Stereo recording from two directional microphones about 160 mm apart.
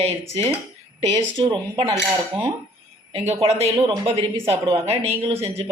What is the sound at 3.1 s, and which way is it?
Speech, 35° right (ahead or behind).